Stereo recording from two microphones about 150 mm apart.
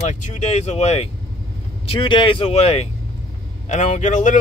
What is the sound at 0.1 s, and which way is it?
Speech, 50° left (ahead or behind).